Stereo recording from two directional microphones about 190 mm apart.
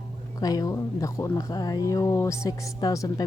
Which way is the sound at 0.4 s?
20° left (ahead or behind).